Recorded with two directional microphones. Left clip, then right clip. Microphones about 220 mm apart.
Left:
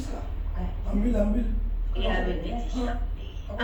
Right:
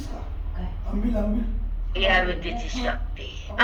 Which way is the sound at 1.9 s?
30° right (ahead or behind).